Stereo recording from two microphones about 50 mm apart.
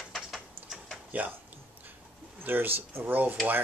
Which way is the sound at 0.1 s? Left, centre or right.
Centre.